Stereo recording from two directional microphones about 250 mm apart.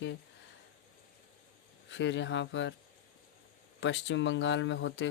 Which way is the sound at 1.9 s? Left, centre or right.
Left.